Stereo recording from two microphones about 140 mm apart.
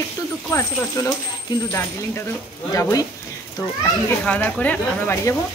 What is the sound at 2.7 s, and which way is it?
Speech, 25° left (ahead or behind).